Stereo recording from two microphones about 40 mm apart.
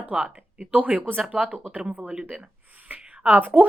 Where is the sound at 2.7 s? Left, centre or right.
Right.